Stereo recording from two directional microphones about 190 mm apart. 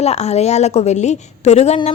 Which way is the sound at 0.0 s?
35° left (ahead or behind).